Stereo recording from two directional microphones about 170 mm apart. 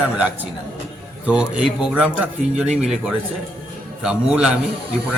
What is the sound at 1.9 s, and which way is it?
A man's voice, 5° right (ahead or behind).